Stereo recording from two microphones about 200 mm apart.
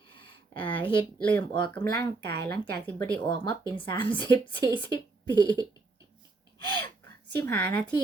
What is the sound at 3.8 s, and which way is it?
A woman's voice, 25° left (ahead or behind).